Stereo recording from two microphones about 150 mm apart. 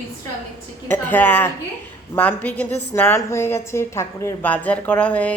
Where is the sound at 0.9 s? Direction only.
10° left (ahead or behind).